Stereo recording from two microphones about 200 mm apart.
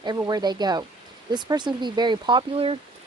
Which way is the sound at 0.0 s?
20° right (ahead or behind).